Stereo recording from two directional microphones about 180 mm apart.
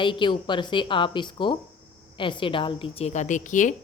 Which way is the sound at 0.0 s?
25° left (ahead or behind).